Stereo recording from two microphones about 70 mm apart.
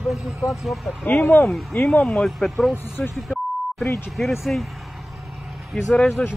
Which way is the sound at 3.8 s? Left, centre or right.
Left.